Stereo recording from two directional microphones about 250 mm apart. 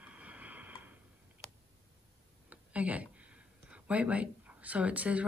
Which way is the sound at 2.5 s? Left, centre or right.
Centre.